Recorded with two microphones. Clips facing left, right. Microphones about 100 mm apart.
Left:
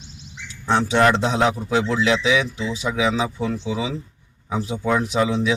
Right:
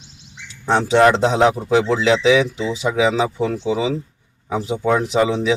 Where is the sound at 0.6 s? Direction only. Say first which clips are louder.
Right 4 dB; 25° right (ahead or behind).